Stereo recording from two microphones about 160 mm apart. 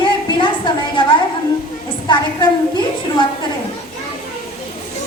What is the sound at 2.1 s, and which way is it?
A woman's voice, 30° left (ahead or behind).